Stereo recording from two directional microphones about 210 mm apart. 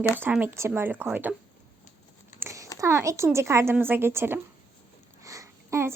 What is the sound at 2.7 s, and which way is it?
Speech, 15° right (ahead or behind).